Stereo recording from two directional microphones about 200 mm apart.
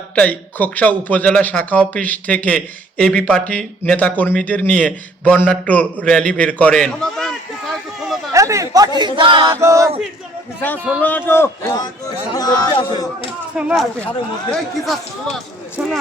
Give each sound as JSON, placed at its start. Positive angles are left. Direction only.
{"t": 0.2, "sound": "speech", "side_deg": 10}
{"t": 8.3, "sound": "a man's voice", "side_deg": -15}
{"t": 9.0, "sound": "chant", "side_deg": -20}
{"t": 11.0, "sound": "speech", "side_deg": 10}
{"t": 13.6, "sound": "speech", "side_deg": -5}